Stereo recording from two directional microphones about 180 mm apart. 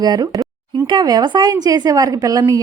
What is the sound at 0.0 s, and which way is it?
A woman's voice, 20° right (ahead or behind).